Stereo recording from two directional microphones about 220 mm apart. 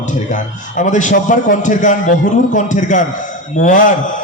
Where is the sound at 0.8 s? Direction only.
35° left (ahead or behind).